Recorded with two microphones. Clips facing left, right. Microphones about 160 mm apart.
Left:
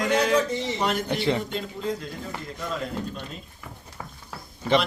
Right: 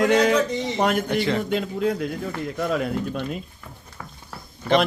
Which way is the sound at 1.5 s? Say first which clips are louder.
Right 6 dB; 70° right (ahead or behind).